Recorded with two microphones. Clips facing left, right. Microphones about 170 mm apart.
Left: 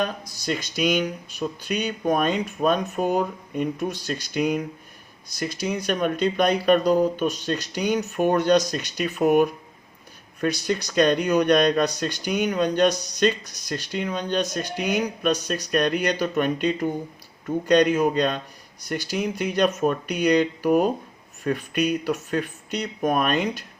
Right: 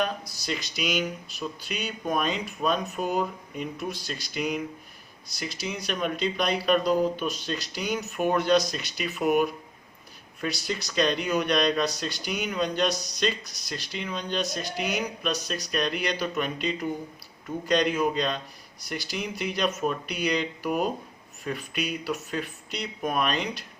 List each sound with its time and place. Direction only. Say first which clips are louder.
0.0 s speech: left 2 dB; 45° left (ahead or behind)